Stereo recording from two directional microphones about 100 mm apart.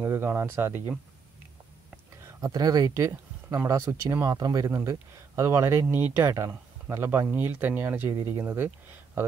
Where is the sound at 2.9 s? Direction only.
30° right (ahead or behind).